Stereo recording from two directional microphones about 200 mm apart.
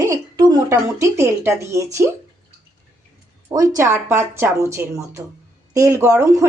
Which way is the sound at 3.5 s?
20° right (ahead or behind).